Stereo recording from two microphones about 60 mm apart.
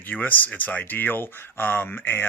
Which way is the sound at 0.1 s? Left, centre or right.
Left.